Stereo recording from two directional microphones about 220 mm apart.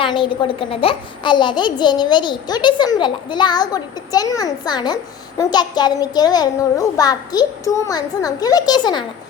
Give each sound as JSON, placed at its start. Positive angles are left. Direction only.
{"t": 0.0, "sound": "a child's voice", "side_deg": 20}
{"t": 5.4, "sound": "child singing", "side_deg": 20}